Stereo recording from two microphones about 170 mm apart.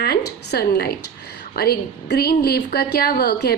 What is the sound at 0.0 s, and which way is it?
A woman's voice, 75° left (ahead or behind).